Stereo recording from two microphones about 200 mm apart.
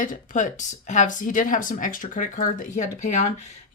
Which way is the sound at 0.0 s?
40° left (ahead or behind).